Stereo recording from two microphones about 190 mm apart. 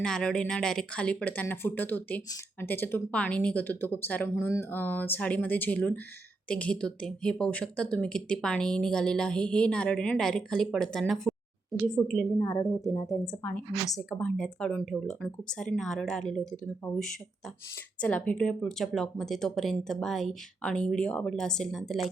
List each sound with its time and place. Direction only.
0.0 s speech: 5° left (ahead or behind)